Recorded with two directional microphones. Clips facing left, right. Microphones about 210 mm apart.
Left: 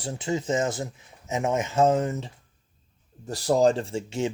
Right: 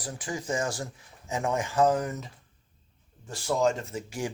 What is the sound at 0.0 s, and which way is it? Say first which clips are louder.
Speech: left 7 dB; 25° left (ahead or behind).